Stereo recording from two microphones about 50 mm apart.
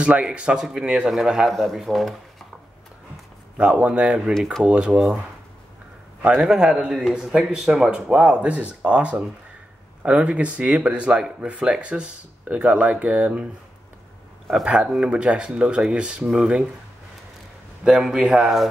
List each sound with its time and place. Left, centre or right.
0.0 s a man's voice: right
1.5 s speech: centre
3.5 s a man's voice: right
6.2 s a man's voice: centre
7.9 s speech: right
14.5 s a man's voice: centre
17.8 s a man's voice: centre